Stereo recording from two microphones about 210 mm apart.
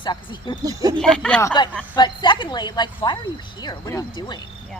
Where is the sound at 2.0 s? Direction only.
20° left (ahead or behind).